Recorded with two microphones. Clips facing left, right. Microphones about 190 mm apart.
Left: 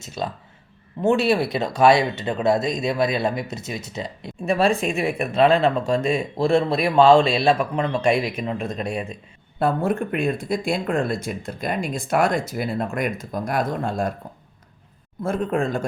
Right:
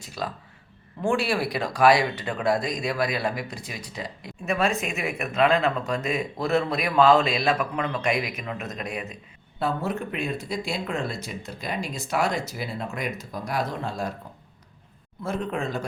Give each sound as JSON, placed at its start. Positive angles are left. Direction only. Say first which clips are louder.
{"t": 0.0, "sound": "speech", "louder": "left 4 dB", "side_deg": 25}
{"t": 9.6, "sound": "speech", "louder": "left 6 dB", "side_deg": 50}
{"t": 15.2, "sound": "speech", "louder": "left 6 dB", "side_deg": 50}